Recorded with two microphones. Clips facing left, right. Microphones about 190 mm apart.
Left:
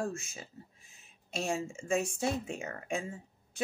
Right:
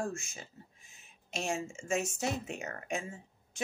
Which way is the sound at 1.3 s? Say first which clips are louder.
Left 1 dB; 35° left (ahead or behind).